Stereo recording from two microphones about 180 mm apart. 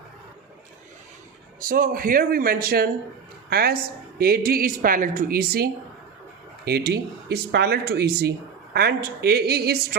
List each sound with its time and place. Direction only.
1.5 s speech: 50° right (ahead or behind)